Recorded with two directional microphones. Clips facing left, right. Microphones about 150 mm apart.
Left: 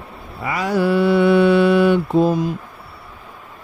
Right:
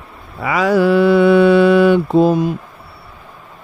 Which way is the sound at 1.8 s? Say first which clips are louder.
Right 4 dB; 90° right.